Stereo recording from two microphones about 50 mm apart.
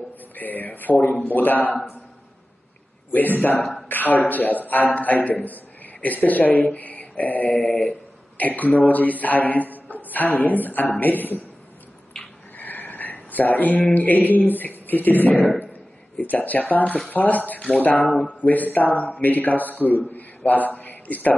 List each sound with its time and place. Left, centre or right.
0.4 s speech: left
3.1 s a man's voice: left
7.5 s mantra: centre
8.4 s speech: left
12.5 s a sound: left
13.9 s a man's voice: left